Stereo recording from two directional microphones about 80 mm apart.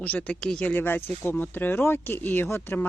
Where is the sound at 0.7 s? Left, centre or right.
Left.